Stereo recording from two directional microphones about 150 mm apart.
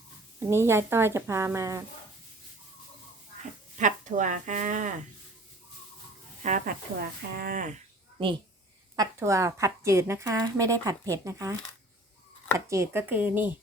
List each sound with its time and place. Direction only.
0.3 s speech: 15° right (ahead or behind)
3.8 s speech: 55° right (ahead or behind)
6.4 s speech: 55° right (ahead or behind)
7.3 s speech: 70° right (ahead or behind)
8.2 s a child's voice: 35° right (ahead or behind)
9.0 s speech: 20° right (ahead or behind)
12.5 s speech: 20° right (ahead or behind)